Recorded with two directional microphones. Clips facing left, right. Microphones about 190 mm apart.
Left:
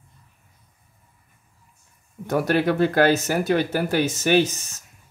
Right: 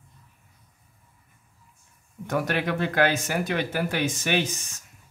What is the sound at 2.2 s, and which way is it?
Speech, 35° left (ahead or behind).